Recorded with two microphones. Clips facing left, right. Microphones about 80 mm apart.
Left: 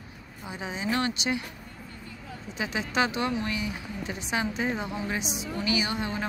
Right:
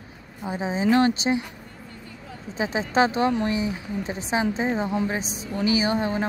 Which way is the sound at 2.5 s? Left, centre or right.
Right.